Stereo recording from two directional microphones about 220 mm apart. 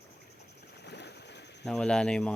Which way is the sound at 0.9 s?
50° left (ahead or behind).